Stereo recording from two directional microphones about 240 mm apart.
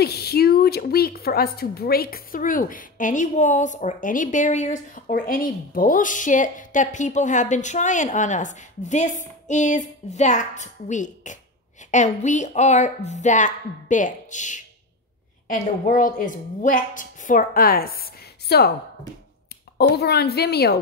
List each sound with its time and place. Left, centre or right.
0.0 s a woman's voice: left
20.0 s a woman's voice: left